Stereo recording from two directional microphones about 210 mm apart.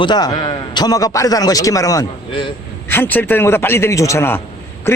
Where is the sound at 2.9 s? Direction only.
10° left (ahead or behind).